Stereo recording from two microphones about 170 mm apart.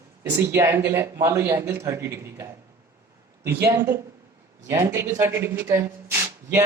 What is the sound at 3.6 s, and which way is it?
Speech, 15° right (ahead or behind).